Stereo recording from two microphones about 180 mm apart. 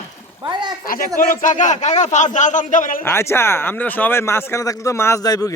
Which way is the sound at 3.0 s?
15° left (ahead or behind).